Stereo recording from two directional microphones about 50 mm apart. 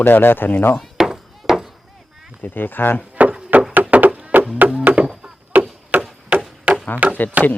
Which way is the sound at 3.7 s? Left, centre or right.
Right.